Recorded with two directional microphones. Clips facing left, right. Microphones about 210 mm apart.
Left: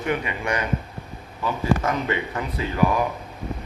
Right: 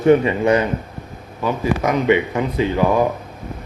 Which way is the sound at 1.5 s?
15° right (ahead or behind).